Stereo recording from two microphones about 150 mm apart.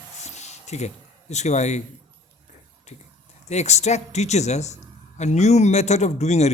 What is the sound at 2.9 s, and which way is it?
A man's voice, 50° left (ahead or behind).